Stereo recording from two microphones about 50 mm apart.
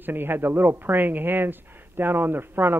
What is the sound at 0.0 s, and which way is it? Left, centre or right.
Speech, right.